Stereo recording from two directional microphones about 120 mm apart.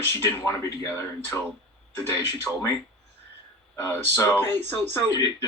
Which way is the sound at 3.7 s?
20° left (ahead or behind).